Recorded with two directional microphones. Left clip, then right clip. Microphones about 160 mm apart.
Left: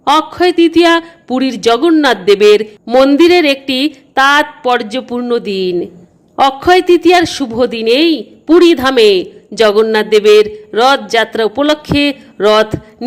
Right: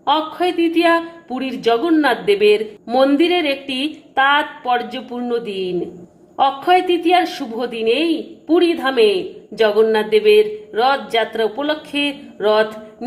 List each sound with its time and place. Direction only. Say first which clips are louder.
0.0 s speech: left 7 dB; 35° left (ahead or behind)